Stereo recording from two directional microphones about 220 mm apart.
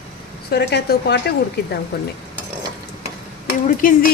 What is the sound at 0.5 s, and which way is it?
Speech, 50° left (ahead or behind).